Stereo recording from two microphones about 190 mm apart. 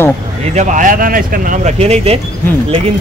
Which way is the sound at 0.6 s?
40° right (ahead or behind).